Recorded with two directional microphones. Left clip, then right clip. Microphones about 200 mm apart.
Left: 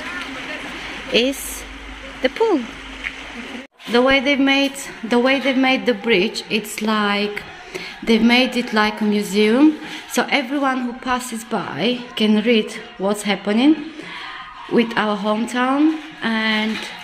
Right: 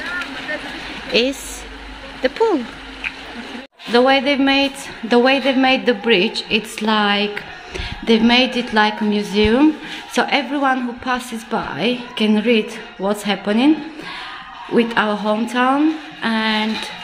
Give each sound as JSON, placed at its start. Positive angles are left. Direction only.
{"t": 1.1, "sound": "a woman's voice", "side_deg": 5}
{"t": 3.9, "sound": "a woman's voice", "side_deg": 0}
{"t": 14.7, "sound": "a woman's voice", "side_deg": 5}